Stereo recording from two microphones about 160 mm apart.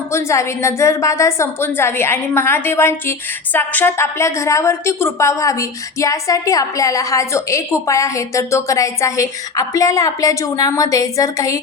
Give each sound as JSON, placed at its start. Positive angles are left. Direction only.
{"t": 0.1, "sound": "a woman's voice", "side_deg": 15}